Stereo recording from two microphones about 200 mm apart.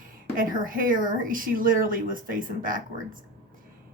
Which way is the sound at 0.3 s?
45° right (ahead or behind).